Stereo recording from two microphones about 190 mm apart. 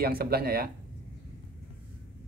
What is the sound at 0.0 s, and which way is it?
Speech, 55° right (ahead or behind).